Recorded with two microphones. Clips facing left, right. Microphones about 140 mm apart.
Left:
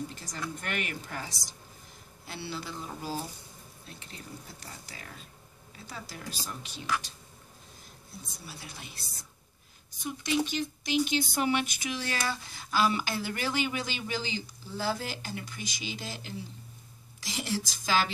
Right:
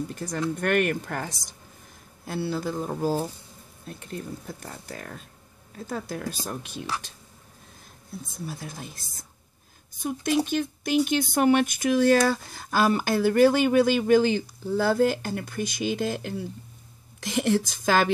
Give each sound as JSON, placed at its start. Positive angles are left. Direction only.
{"t": 0.1, "sound": "a woman's voice", "side_deg": -55}
{"t": 8.5, "sound": "a woman's voice", "side_deg": -45}